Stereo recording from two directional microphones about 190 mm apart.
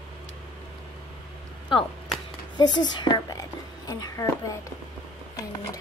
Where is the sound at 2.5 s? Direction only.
20° left (ahead or behind).